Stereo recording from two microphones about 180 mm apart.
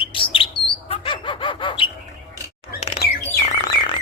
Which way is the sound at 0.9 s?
30° left (ahead or behind).